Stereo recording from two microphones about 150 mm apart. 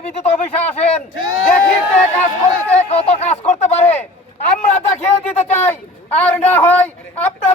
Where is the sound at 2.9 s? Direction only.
45° left (ahead or behind).